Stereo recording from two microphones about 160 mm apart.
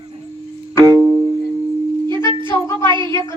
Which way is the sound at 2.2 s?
30° right (ahead or behind).